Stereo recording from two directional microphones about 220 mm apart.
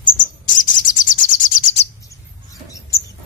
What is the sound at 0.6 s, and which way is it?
Bird, 35° left (ahead or behind).